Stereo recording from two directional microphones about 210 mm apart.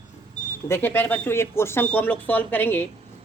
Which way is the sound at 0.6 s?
10° left (ahead or behind).